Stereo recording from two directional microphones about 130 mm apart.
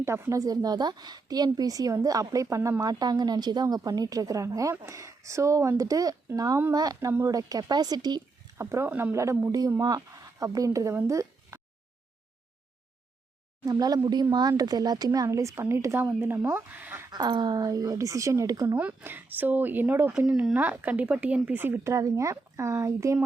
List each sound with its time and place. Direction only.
0.0 s a woman's voice: 20° right (ahead or behind)
2.8 s a woman's voice: 30° right (ahead or behind)
8.5 s speech: 20° right (ahead or behind)
8.9 s a woman's voice: 10° right (ahead or behind)
11.0 s a sound: 25° right (ahead or behind)
13.7 s a woman's voice: 30° right (ahead or behind)
17.1 s a woman's voice: 35° right (ahead or behind)
18.8 s speech: 10° right (ahead or behind)